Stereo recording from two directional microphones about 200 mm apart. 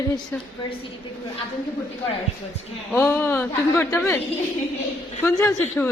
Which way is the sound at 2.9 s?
10° left (ahead or behind).